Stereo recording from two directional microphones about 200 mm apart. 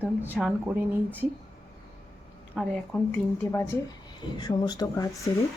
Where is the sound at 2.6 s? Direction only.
Centre (ahead or behind).